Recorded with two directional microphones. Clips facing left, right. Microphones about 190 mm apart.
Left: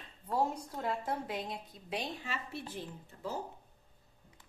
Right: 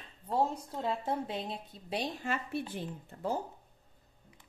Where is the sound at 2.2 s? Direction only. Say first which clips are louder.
Right 6 dB; 50° right (ahead or behind).